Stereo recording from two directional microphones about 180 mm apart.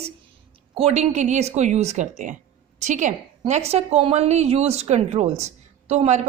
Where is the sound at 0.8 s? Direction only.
35° right (ahead or behind).